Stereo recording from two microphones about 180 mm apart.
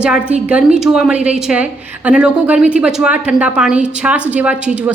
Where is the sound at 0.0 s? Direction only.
5° right (ahead or behind).